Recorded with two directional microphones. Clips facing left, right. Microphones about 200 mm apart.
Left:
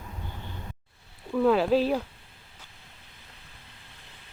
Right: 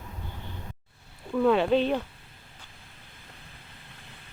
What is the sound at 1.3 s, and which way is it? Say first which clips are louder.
Speech: even; centre (ahead or behind).